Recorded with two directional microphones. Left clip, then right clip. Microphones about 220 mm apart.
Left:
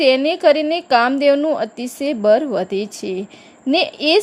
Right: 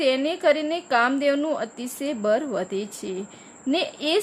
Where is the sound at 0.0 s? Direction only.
25° left (ahead or behind).